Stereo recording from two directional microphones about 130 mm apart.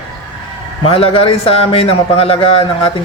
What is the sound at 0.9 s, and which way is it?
A man's voice, 45° left (ahead or behind).